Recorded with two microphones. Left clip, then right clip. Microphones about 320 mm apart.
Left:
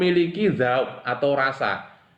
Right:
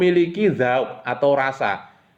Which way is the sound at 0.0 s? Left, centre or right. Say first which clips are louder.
Right 3 dB; right.